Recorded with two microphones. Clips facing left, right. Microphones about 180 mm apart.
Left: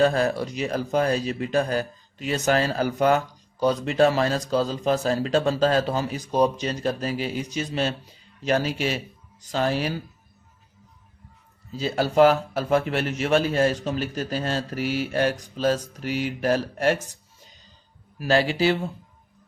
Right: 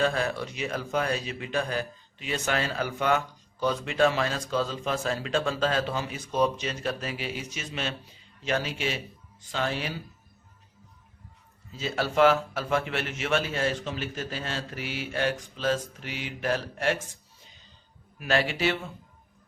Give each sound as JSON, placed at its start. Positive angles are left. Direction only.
{"t": 0.0, "sound": "speech", "side_deg": 40}
{"t": 11.7, "sound": "speech", "side_deg": 35}
{"t": 18.2, "sound": "speech", "side_deg": 35}